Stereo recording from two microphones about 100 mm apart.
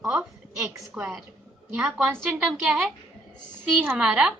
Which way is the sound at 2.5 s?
5° right (ahead or behind).